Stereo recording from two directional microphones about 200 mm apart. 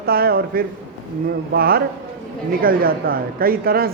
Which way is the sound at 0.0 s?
50° right (ahead or behind).